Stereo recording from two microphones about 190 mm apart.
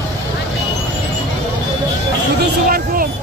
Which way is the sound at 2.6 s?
50° right (ahead or behind).